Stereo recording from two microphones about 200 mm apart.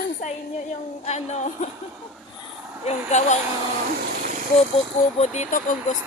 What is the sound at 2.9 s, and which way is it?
Speech, 35° left (ahead or behind).